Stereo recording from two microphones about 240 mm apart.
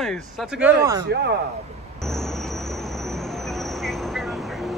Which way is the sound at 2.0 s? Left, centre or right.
Centre.